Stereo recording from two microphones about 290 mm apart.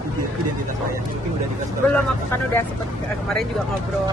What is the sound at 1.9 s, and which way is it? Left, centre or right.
Speech, centre.